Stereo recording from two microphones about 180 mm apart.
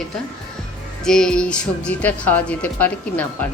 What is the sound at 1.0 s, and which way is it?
A woman's voice, 5° left (ahead or behind).